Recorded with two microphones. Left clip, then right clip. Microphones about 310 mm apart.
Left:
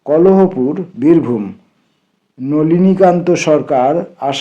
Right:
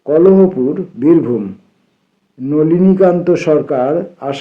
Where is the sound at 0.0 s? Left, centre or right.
Centre.